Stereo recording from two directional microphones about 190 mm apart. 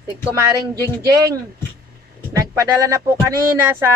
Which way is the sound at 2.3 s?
15° right (ahead or behind).